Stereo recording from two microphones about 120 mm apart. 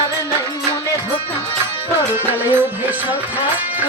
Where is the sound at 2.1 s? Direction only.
20° right (ahead or behind).